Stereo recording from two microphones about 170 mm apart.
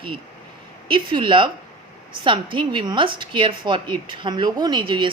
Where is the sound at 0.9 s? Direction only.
30° right (ahead or behind).